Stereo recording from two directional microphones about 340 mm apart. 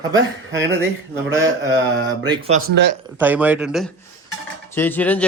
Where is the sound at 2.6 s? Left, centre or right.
Right.